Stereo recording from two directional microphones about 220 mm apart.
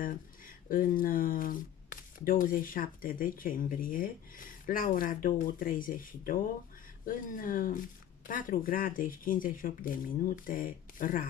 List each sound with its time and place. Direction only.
0.7 s speech: 40° left (ahead or behind)